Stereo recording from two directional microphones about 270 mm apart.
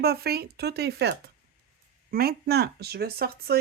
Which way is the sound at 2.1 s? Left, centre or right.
Right.